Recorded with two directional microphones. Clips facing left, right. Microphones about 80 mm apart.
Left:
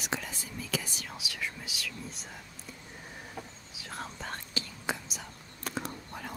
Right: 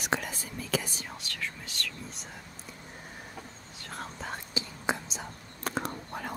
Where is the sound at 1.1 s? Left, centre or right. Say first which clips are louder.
Left 2 dB; centre.